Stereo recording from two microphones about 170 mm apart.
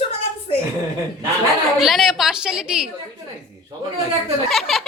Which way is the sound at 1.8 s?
Centre (ahead or behind).